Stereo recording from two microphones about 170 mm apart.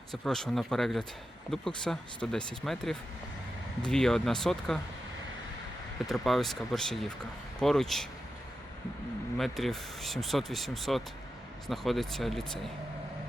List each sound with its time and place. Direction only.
0.1 s speech: centre (ahead or behind)
6.1 s speech: centre (ahead or behind)
9.4 s speech: centre (ahead or behind)